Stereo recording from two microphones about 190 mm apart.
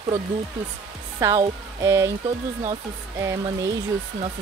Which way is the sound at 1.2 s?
15° right (ahead or behind).